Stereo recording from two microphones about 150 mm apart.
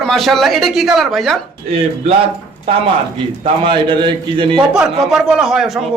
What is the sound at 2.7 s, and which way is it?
A man's voice, 40° right (ahead or behind).